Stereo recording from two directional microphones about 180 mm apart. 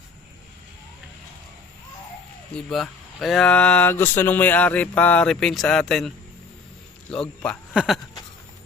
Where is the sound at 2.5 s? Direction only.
5° left (ahead or behind).